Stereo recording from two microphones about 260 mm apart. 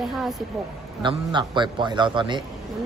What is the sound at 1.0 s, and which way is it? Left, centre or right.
A man's voice, centre.